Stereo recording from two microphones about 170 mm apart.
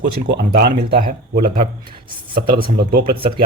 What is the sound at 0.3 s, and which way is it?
Speech, 70° right (ahead or behind).